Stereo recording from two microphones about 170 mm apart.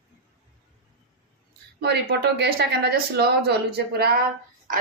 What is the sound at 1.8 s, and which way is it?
A woman's voice, 75° right (ahead or behind).